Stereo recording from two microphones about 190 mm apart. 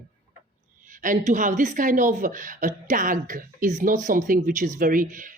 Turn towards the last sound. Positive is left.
turn(degrees=-45)  # may be behind; listen again after turning